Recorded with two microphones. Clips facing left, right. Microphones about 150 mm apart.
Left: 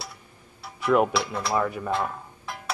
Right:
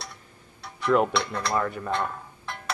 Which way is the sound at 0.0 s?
5° left (ahead or behind).